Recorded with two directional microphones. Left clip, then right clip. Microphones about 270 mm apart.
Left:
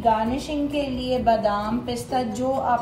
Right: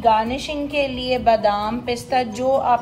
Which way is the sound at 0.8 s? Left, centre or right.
Right.